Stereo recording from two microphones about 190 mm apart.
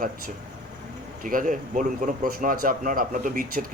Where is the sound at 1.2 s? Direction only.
45° right (ahead or behind).